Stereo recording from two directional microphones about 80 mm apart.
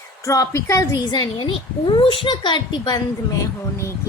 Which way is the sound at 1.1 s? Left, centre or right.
Left.